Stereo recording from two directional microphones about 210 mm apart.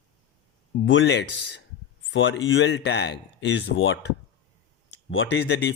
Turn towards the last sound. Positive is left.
turn(degrees=55)  # may be behind; listen again after turning